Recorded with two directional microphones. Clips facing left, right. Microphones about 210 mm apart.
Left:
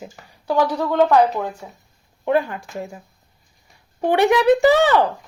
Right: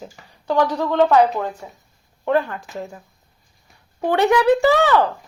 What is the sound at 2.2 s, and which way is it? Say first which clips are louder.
Speech: even; 15° left (ahead or behind).